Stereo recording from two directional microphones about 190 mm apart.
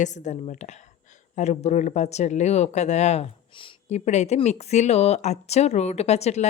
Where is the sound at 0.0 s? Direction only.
40° left (ahead or behind).